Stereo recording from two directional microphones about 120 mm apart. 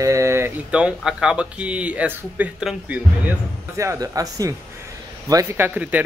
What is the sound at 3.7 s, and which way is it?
Speech, 25° right (ahead or behind).